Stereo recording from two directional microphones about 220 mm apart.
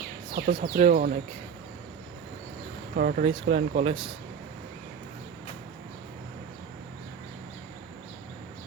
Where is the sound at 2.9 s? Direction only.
40° right (ahead or behind).